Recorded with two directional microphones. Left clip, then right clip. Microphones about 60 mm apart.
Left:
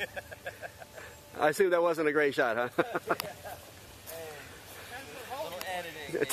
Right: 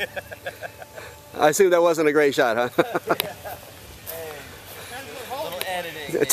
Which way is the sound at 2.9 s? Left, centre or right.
Centre.